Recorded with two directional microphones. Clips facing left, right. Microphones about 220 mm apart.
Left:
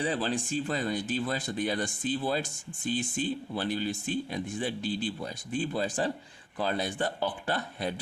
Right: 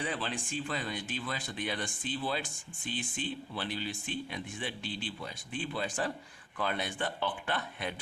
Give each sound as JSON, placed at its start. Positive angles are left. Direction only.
{"t": 0.0, "sound": "speech", "side_deg": 35}